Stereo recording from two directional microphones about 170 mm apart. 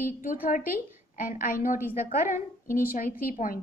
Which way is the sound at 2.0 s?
50° left (ahead or behind).